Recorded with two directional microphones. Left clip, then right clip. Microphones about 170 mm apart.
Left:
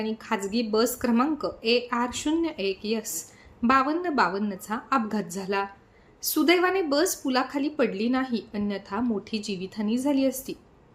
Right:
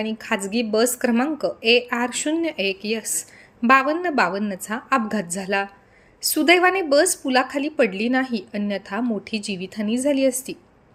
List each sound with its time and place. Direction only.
0.0 s a woman's voice: 15° right (ahead or behind)